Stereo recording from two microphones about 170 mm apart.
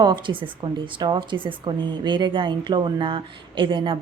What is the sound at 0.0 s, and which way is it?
A woman's voice, 30° right (ahead or behind).